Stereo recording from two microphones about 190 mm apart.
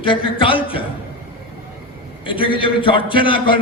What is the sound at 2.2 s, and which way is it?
A man's voice, 25° left (ahead or behind).